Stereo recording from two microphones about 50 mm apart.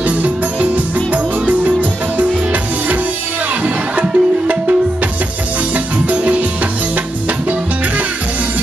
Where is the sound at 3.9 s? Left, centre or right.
Right.